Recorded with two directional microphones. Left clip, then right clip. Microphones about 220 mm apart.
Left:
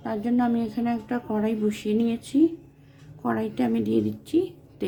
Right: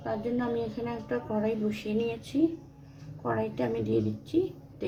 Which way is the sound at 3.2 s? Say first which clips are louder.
Left 3 dB; 55° left (ahead or behind).